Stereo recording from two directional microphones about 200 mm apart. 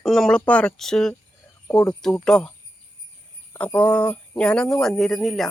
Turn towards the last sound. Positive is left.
turn(degrees=0)  # may be behind; listen again after turning